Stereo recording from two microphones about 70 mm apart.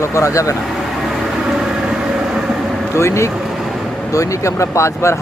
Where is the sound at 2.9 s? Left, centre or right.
Left.